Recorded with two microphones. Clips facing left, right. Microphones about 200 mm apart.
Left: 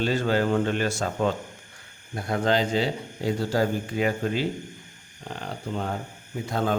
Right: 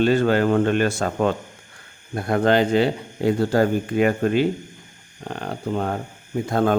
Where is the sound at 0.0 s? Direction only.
60° right (ahead or behind).